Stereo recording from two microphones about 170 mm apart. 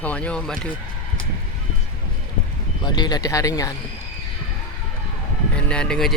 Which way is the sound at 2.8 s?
25° left (ahead or behind).